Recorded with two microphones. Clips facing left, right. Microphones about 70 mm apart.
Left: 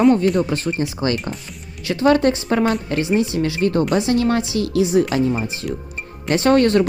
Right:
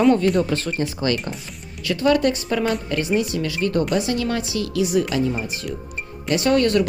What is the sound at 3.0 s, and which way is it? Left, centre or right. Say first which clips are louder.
A woman's voice: left 3 dB; left.